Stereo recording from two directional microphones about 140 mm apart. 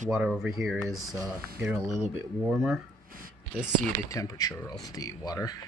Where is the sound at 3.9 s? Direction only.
25° left (ahead or behind).